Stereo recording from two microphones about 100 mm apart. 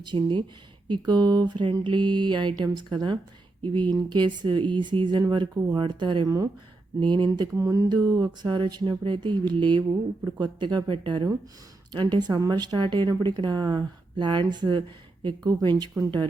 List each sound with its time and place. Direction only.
0.0 s speech: 50° right (ahead or behind)
6.2 s speech: 35° right (ahead or behind)
7.0 s speech: 50° right (ahead or behind)
7.5 s speech: 30° right (ahead or behind)